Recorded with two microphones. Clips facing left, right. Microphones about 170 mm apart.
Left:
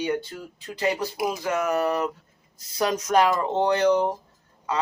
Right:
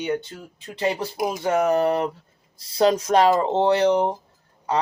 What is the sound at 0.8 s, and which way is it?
Speech, 30° right (ahead or behind).